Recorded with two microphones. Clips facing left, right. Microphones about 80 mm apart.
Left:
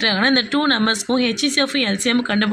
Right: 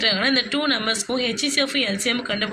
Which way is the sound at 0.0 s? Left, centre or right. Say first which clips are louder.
Left 4 dB; left.